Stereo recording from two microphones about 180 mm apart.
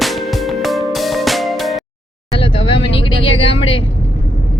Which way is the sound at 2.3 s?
30° left (ahead or behind).